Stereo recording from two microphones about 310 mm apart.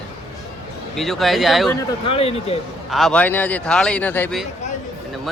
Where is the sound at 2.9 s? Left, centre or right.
Centre.